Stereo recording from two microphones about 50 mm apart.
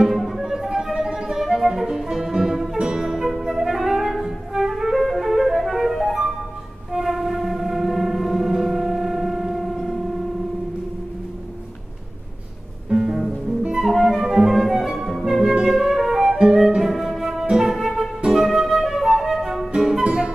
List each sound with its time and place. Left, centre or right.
0.1 s music: centre
12.9 s music: centre
15.4 s flute: centre
20.0 s music: centre